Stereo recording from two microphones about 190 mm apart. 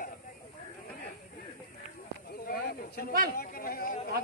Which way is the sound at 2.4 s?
50° left (ahead or behind).